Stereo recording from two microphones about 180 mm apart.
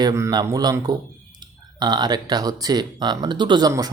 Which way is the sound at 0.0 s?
20° right (ahead or behind).